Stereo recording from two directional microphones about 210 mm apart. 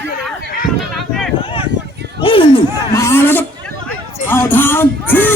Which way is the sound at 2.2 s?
25° left (ahead or behind).